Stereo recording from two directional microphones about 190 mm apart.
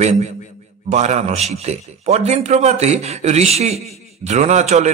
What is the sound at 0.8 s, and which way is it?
A man's voice, 35° right (ahead or behind).